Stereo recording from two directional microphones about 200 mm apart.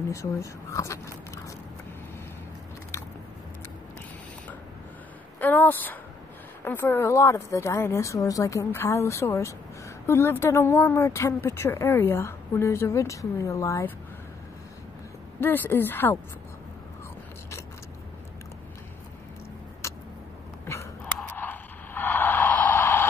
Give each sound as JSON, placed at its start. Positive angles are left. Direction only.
{"t": 0.1, "sound": "speech", "side_deg": 15}
{"t": 5.4, "sound": "speech", "side_deg": 10}
{"t": 15.4, "sound": "speech", "side_deg": 10}
{"t": 19.8, "sound": "a sound", "side_deg": 15}